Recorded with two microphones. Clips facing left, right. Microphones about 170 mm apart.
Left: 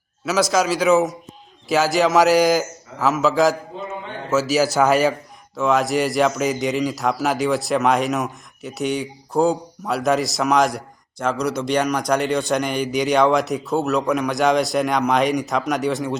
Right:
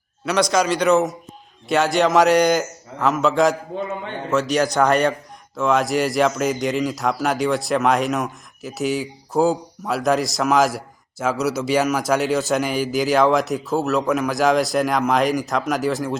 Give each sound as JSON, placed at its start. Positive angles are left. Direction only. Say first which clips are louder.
{"t": 0.3, "sound": "a man's voice", "louder": "even", "side_deg": 5}